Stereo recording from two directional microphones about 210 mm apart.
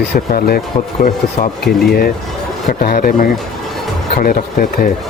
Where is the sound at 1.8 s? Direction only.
45° left (ahead or behind).